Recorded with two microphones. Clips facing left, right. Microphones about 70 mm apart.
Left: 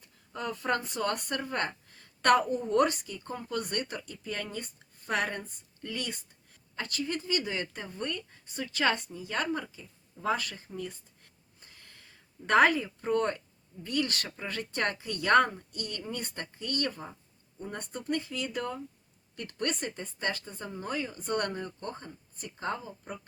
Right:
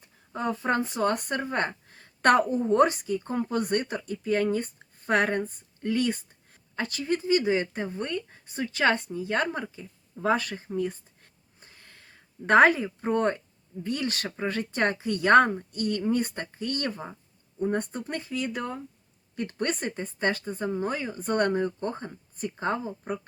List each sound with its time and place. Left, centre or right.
0.0 s speech: right